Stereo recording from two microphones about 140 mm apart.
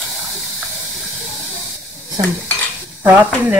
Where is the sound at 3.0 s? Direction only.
15° right (ahead or behind).